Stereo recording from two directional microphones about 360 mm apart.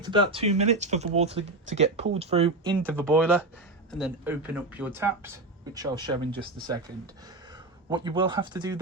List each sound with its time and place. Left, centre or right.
0.0 s speech: centre
2.8 s speech: centre